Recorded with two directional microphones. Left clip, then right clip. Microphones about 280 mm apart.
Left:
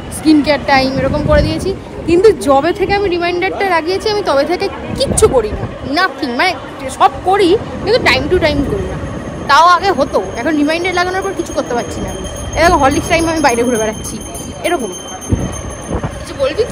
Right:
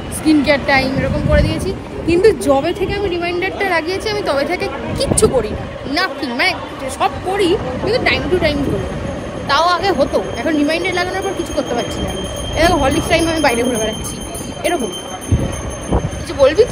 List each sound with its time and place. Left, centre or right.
0.2 s speech: centre
16.3 s speech: right